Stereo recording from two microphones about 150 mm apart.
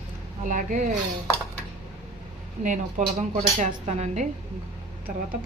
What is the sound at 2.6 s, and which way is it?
Speech, 55° right (ahead or behind).